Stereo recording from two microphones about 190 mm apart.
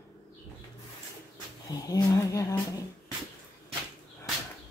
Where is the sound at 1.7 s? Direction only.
20° left (ahead or behind).